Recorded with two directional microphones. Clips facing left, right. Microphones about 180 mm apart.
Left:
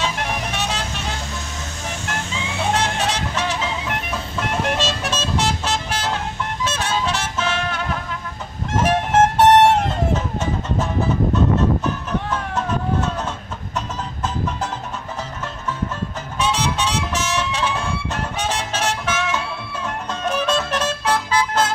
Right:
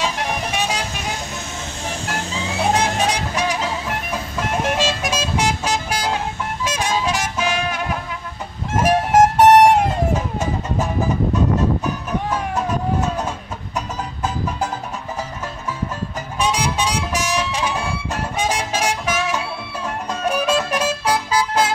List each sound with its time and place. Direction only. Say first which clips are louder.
0.5 s vehicle: right 2 dB; 10° right (ahead or behind)
2.7 s music: right 2 dB; 15° right (ahead or behind)
8.7 s vehicle: right 2 dB; 10° right (ahead or behind)
11.3 s music: left 1 dB; 10° right (ahead or behind)
16.3 s music: right 1 dB; 10° right (ahead or behind)